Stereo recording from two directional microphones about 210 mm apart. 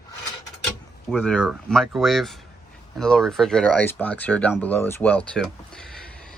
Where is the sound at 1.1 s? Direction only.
5° left (ahead or behind).